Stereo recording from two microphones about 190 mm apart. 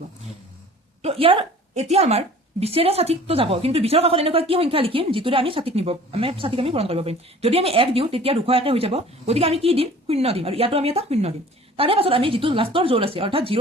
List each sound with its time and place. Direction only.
1.0 s a woman's voice: 30° right (ahead or behind)